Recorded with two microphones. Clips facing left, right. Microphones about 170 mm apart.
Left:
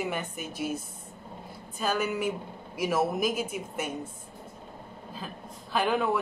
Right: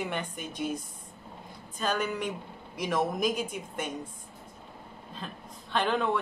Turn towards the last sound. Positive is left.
turn(degrees=5)  # may be behind; listen again after turning